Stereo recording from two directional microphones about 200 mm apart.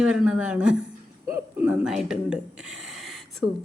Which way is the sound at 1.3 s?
5° right (ahead or behind).